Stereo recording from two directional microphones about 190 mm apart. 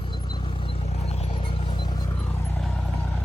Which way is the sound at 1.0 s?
35° left (ahead or behind).